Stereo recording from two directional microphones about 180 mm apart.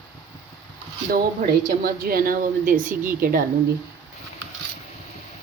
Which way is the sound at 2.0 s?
50° right (ahead or behind).